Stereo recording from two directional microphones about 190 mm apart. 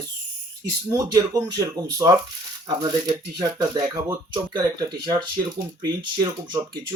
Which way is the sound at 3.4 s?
20° right (ahead or behind).